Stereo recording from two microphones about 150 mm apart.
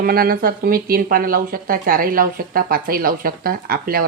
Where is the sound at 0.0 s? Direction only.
80° right.